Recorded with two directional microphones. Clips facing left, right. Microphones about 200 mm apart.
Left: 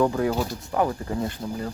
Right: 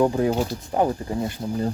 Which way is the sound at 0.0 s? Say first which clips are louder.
Right 2 dB; 25° right (ahead or behind).